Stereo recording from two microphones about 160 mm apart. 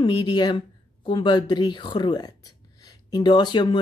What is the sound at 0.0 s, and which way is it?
A woman's voice, 30° left (ahead or behind).